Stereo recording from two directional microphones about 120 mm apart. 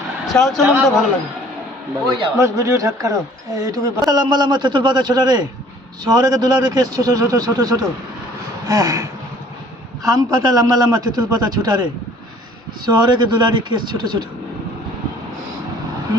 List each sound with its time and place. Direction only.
0.3 s a man's voice: 5° left (ahead or behind)
2.4 s a man's voice: 25° right (ahead or behind)